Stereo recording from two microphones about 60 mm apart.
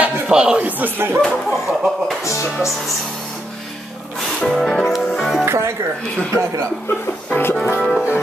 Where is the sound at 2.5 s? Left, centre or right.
Centre.